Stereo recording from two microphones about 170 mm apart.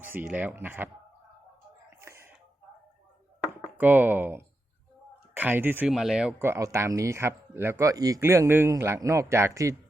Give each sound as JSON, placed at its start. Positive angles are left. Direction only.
{"t": 0.0, "sound": "speech", "side_deg": -10}
{"t": 2.0, "sound": "throat clearing", "side_deg": -15}
{"t": 3.8, "sound": "speech", "side_deg": -10}